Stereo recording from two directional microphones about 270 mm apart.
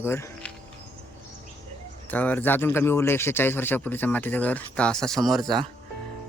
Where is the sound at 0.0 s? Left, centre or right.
Centre.